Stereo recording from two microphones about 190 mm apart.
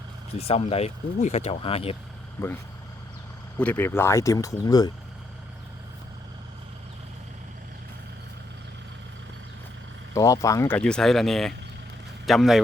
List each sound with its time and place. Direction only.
0.3 s speech: 30° left (ahead or behind)
2.4 s speech: 15° left (ahead or behind)
3.6 s speech: 10° left (ahead or behind)
10.2 s speech: 15° left (ahead or behind)
10.7 s speech: 5° left (ahead or behind)